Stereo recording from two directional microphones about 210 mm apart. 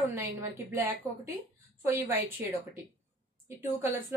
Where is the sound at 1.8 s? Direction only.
10° right (ahead or behind).